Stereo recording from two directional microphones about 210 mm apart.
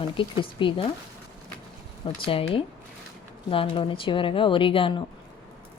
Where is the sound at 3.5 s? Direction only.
25° left (ahead or behind).